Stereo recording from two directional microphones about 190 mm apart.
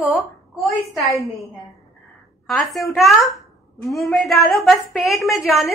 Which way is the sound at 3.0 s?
Centre (ahead or behind).